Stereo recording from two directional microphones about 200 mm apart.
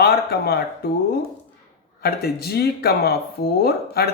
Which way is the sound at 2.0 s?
50° left (ahead or behind).